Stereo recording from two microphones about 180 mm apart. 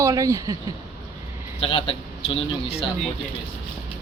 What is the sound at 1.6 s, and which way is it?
Speech, 30° left (ahead or behind).